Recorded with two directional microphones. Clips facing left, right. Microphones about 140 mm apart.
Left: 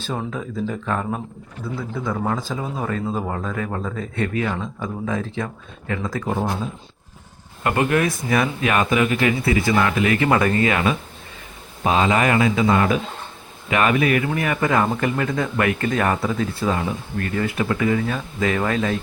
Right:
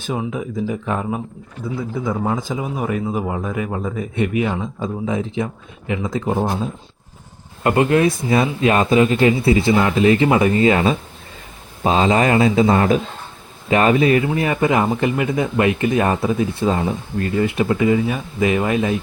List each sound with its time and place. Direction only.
0.0 s speech: 15° right (ahead or behind)
7.6 s speech: 25° right (ahead or behind)